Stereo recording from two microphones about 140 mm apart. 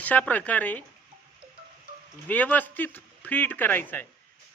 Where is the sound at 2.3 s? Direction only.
10° left (ahead or behind).